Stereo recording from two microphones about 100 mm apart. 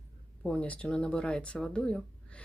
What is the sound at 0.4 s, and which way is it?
Speech, 10° left (ahead or behind).